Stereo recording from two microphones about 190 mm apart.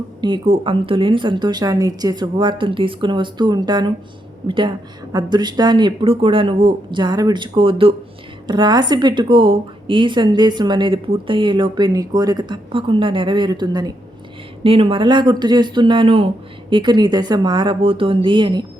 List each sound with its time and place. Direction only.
0.2 s a woman's voice: 25° right (ahead or behind)